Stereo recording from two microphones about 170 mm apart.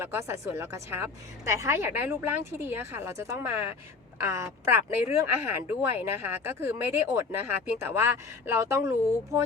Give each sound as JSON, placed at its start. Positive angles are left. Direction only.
{"t": 0.0, "sound": "speech", "side_deg": -15}